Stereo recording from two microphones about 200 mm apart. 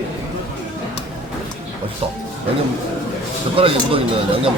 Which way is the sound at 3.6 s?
25° right (ahead or behind).